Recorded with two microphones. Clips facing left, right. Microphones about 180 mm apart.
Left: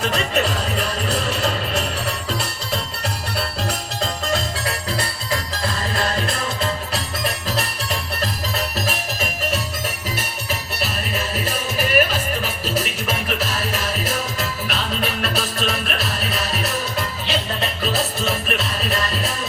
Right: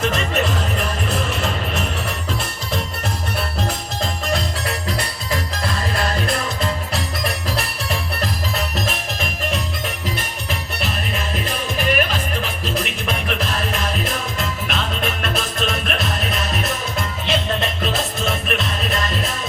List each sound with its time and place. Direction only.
0.0 s music: 35° left (ahead or behind)
8.5 s music: 40° left (ahead or behind)
11.4 s music: 40° left (ahead or behind)
17.2 s music: centre (ahead or behind)
18.3 s music: 40° left (ahead or behind)